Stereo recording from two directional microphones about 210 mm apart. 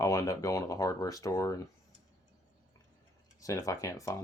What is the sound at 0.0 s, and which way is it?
Speech, 15° left (ahead or behind).